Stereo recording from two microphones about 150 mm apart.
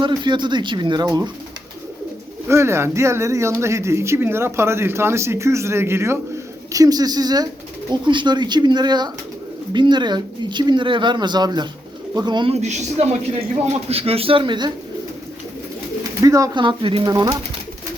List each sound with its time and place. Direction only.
0.0 s speech: 30° right (ahead or behind)
2.5 s speech: 15° right (ahead or behind)
12.5 s a woman's voice: 45° right (ahead or behind); by 14.7 s 30° right (ahead or behind)
16.2 s speech: 20° right (ahead or behind)
16.6 s speech: 35° right (ahead or behind)